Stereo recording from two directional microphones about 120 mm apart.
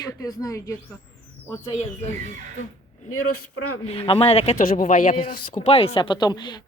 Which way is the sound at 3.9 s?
50° left (ahead or behind).